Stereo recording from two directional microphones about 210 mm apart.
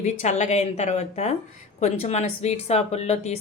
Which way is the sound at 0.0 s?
35° left (ahead or behind).